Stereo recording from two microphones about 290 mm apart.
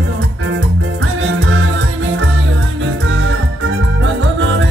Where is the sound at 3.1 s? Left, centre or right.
Right.